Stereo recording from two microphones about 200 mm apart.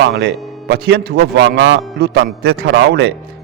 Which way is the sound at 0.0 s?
55° right (ahead or behind).